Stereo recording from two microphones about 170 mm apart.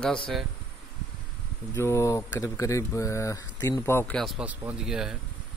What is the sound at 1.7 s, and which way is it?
Speech, 15° left (ahead or behind).